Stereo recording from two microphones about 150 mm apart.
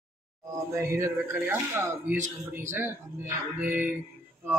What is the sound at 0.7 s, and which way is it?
Speech, 20° right (ahead or behind).